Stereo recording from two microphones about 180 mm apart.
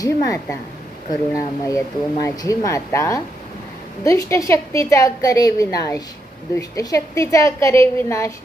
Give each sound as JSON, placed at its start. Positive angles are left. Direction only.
{"t": 0.0, "sound": "a woman's voice", "side_deg": 20}